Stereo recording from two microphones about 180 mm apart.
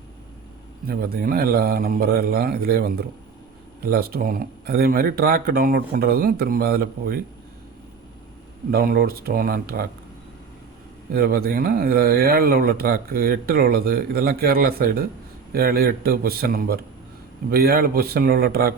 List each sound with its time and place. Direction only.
0.9 s speech: 55° right (ahead or behind)
8.7 s speech: 55° right (ahead or behind)
11.1 s speech: 60° right (ahead or behind)